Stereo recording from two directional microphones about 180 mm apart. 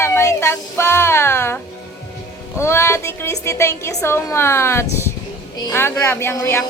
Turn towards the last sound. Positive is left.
turn(degrees=15)  # may be behind; listen again after turning